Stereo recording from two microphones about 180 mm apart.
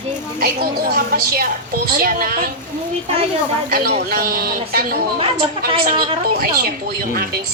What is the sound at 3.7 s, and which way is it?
A woman's voice, 55° right (ahead or behind).